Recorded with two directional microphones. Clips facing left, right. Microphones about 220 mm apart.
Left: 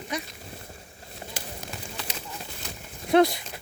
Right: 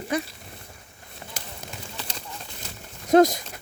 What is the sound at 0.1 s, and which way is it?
Speech, 55° right (ahead or behind).